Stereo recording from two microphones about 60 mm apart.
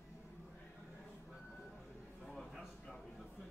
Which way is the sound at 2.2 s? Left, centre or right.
Centre.